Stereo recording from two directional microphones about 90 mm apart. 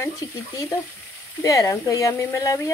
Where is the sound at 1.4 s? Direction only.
40° left (ahead or behind).